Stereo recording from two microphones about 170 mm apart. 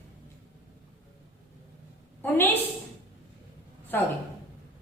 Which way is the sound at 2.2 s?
10° left (ahead or behind).